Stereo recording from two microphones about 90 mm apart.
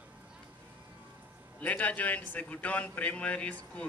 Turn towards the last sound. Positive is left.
turn(degrees=15)  # may be behind; listen again after turning